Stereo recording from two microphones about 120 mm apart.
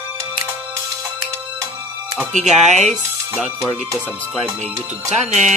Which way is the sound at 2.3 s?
75° right (ahead or behind).